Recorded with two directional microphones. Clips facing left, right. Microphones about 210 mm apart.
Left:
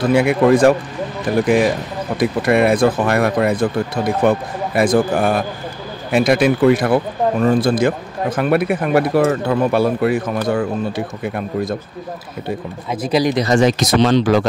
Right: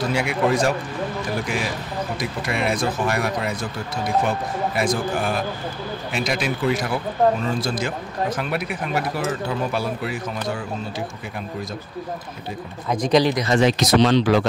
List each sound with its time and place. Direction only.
0.1 s speech: 60° left (ahead or behind)
12.9 s speech: 5° left (ahead or behind)
13.4 s speech: 40° left (ahead or behind)